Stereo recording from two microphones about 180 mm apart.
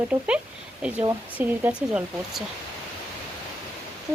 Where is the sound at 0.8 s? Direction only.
5° right (ahead or behind).